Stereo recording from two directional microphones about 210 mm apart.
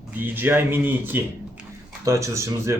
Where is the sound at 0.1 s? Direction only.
10° right (ahead or behind).